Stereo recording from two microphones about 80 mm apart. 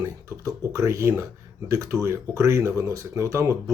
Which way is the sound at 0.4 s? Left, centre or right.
Right.